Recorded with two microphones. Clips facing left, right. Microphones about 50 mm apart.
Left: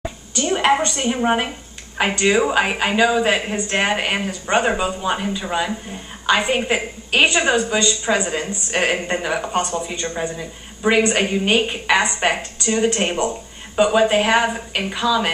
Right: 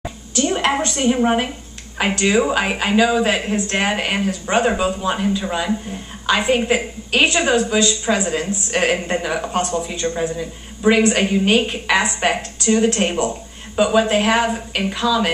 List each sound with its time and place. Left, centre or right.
0.0 s a woman's voice: centre